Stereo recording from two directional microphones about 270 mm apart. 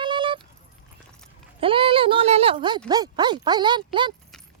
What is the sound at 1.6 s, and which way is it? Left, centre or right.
Speech, centre.